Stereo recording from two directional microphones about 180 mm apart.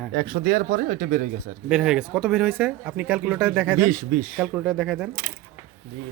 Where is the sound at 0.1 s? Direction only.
60° right (ahead or behind).